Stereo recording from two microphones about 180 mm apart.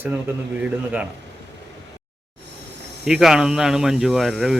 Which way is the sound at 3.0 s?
5° right (ahead or behind).